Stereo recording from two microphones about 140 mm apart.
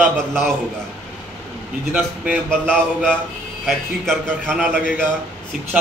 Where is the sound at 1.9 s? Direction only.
10° right (ahead or behind).